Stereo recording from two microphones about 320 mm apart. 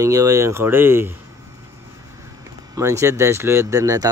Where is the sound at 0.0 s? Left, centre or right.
Centre.